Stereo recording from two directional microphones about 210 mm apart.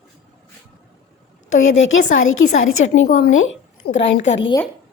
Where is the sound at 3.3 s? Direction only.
70° left (ahead or behind).